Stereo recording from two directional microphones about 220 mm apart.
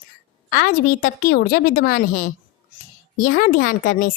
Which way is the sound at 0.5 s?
40° left (ahead or behind).